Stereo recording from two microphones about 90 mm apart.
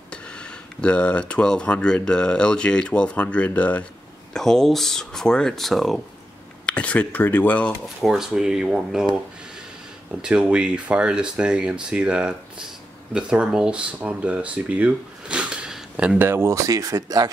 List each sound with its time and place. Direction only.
0.1 s speech: 10° left (ahead or behind)
4.3 s speech: 5° left (ahead or behind)
6.6 s speech: 15° left (ahead or behind)
8.0 s speech: 5° right (ahead or behind)
10.2 s speech: 10° right (ahead or behind)
16.2 s speech: 25° right (ahead or behind); by 17.3 s 45° right (ahead or behind)